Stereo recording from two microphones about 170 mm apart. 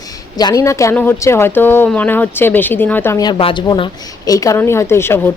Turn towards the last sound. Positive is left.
turn(degrees=15)  # may be behind; listen again after turning